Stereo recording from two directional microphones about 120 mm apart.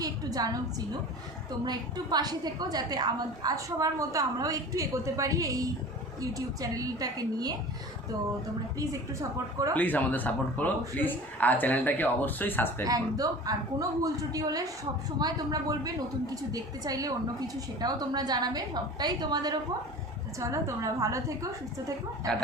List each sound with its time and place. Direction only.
0.0 s a woman's voice: 30° right (ahead or behind)
1.6 s a woman's voice: 35° right (ahead or behind)
9.7 s speech: 15° left (ahead or behind)
12.8 s a woman's voice: 30° right (ahead or behind)